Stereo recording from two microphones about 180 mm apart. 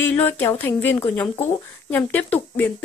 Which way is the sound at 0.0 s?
10° left (ahead or behind).